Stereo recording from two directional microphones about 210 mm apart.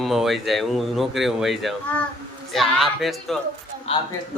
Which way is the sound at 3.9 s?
25° left (ahead or behind).